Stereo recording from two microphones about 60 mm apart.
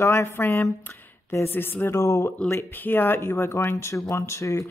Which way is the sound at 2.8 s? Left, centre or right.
Left.